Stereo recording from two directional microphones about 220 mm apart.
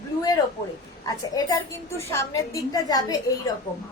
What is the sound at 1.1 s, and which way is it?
A woman's voice, 15° left (ahead or behind).